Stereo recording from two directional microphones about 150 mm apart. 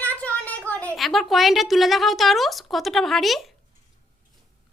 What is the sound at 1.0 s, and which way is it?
A woman's voice, centre (ahead or behind).